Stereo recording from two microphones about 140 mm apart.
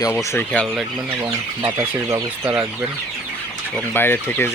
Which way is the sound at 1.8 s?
15° right (ahead or behind).